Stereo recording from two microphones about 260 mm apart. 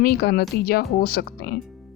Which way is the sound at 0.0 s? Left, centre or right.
Left.